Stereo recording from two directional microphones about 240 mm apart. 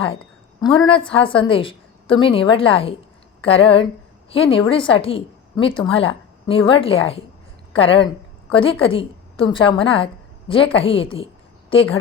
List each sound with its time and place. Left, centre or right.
1.1 s a woman's voice: left